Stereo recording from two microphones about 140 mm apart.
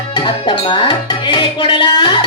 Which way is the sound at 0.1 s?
35° left (ahead or behind).